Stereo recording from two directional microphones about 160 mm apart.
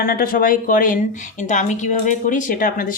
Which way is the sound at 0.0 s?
60° left (ahead or behind).